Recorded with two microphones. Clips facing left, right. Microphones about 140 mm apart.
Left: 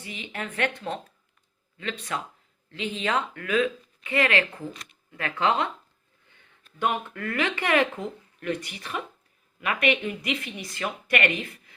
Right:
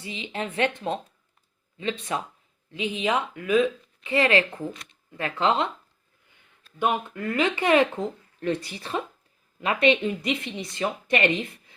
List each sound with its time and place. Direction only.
0.0 s speech: 20° right (ahead or behind)
6.7 s speech: 15° right (ahead or behind)